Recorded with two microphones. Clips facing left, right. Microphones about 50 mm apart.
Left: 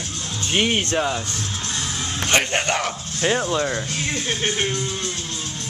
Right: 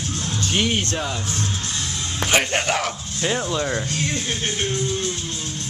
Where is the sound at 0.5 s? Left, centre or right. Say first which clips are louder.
Left 3 dB; centre.